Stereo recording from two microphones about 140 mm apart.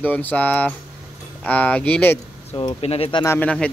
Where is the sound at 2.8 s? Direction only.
45° left (ahead or behind).